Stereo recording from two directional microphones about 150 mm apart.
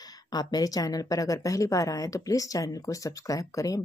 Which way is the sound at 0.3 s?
25° left (ahead or behind).